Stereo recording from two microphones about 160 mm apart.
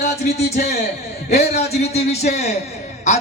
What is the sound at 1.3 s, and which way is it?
A man's voice, 45° left (ahead or behind).